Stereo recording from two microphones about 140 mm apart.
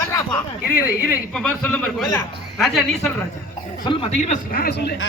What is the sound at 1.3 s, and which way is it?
A man's voice, 5° left (ahead or behind).